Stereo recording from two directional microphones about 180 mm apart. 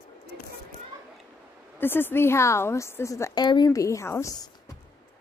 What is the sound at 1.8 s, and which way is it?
A woman's voice, 10° left (ahead or behind).